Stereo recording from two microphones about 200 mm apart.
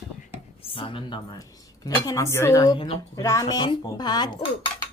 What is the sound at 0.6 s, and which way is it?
Speech, 25° left (ahead or behind).